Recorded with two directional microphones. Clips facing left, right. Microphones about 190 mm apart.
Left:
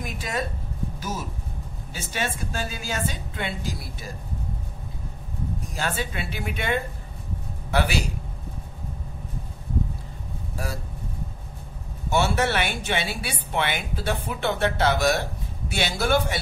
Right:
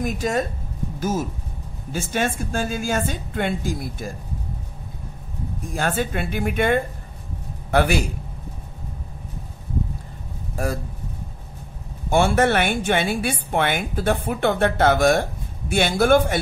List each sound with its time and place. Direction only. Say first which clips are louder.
0.0 s a woman's voice: right 7 dB; 45° right (ahead or behind)
1.9 s a woman's voice: right 7 dB; 50° right (ahead or behind)
5.7 s a woman's voice: right 8 dB; 50° right (ahead or behind)
10.6 s a woman's voice: right 8 dB; 50° right (ahead or behind)
12.1 s a woman's voice: right 5 dB; 50° right (ahead or behind)